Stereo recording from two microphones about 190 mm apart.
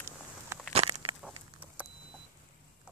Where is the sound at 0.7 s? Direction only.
30° right (ahead or behind).